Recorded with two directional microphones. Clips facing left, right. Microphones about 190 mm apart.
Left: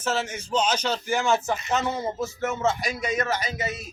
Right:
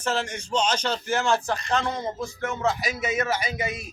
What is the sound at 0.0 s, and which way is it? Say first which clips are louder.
Speech: even; 5° left (ahead or behind).